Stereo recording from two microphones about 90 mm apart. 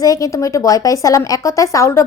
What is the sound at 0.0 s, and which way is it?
A woman's voice, 40° left (ahead or behind).